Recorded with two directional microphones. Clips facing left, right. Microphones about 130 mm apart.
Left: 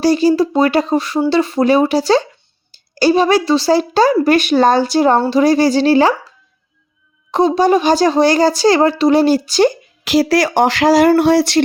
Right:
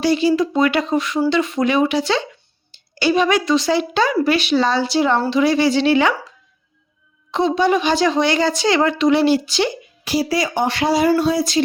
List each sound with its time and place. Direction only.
0.0 s speech: 40° left (ahead or behind)
7.3 s speech: 40° left (ahead or behind)
10.0 s speech: 90° left
11.1 s a sound: 70° left (ahead or behind)